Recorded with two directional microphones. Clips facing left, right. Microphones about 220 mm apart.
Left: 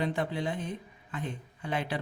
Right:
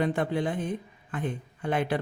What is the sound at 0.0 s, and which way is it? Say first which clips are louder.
Speech: right 4 dB; 50° right (ahead or behind).